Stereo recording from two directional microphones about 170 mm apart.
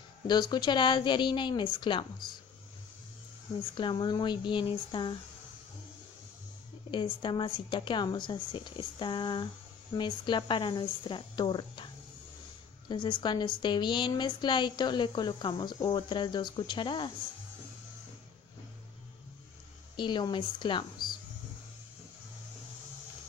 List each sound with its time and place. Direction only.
0.3 s speech: 25° left (ahead or behind)
3.7 s speech: 25° left (ahead or behind)
6.9 s speech: 30° left (ahead or behind)
20.0 s speech: 25° left (ahead or behind)